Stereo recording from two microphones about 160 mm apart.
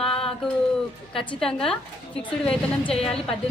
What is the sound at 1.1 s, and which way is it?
Speech, 5° left (ahead or behind).